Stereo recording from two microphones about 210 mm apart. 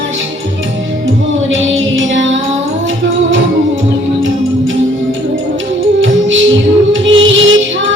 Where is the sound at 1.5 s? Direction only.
65° right (ahead or behind).